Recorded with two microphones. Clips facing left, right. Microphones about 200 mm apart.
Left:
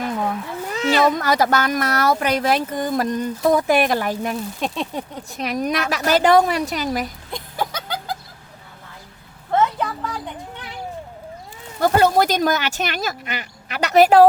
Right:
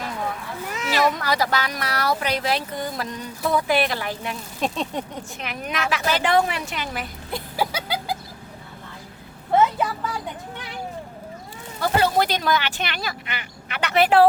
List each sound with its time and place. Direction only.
0.7 s cat: 30° left (ahead or behind)
1.2 s speech: 45° left (ahead or behind)
4.6 s a sound: centre (ahead or behind)
5.4 s a woman's voice: 40° left (ahead or behind)
7.3 s chicken: 5° right (ahead or behind)
9.5 s vehicle: 10° right (ahead or behind)
11.8 s speech: 45° left (ahead or behind)